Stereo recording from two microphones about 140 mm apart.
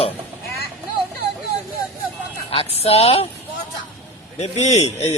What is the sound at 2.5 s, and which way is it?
Speech, 45° left (ahead or behind).